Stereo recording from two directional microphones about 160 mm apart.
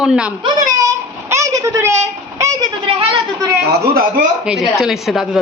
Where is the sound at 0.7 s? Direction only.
20° right (ahead or behind).